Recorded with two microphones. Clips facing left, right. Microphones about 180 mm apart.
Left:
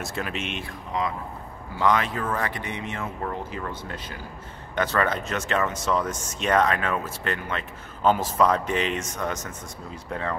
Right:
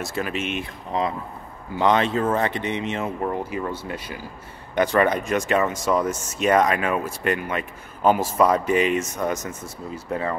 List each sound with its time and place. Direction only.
0.0 s speech: centre (ahead or behind)
0.9 s speech: 30° right (ahead or behind); by 10.3 s 5° right (ahead or behind)